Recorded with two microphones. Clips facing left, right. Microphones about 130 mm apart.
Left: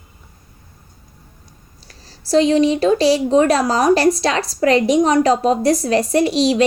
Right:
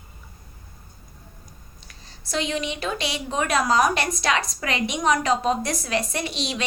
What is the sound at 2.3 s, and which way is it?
A woman's voice, 35° left (ahead or behind).